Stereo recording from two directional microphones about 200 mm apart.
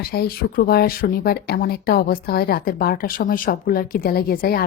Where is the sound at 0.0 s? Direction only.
50° left (ahead or behind).